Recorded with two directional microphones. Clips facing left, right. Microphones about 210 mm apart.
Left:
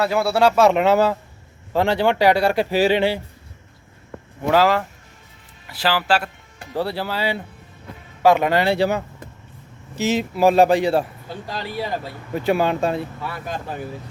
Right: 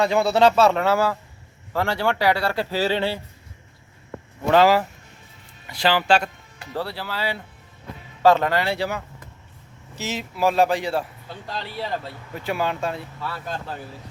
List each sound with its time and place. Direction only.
0.0 s speech: 5° left (ahead or behind)
4.4 s speech: centre (ahead or behind)
6.8 s speech: 25° left (ahead or behind)
8.6 s speech: 30° left (ahead or behind)
11.3 s speech: 10° left (ahead or behind)
12.5 s speech: 25° left (ahead or behind)
13.2 s speech: 15° left (ahead or behind)